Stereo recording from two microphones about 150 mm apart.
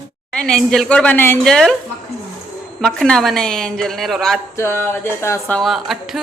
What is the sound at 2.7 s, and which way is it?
Speech, 5° left (ahead or behind).